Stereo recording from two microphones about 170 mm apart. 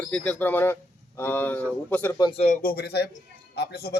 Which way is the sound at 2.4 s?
45° left (ahead or behind).